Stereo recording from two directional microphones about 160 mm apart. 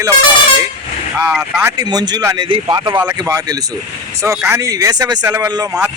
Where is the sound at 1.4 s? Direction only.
20° right (ahead or behind).